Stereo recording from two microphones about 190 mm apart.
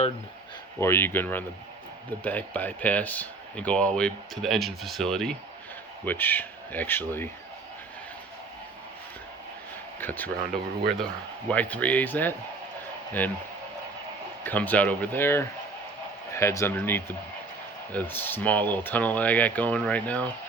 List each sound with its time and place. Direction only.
0.8 s speech: 15° left (ahead or behind)
10.0 s speech: 10° left (ahead or behind)
11.4 s speech: 10° left (ahead or behind)
14.4 s speech: 10° left (ahead or behind)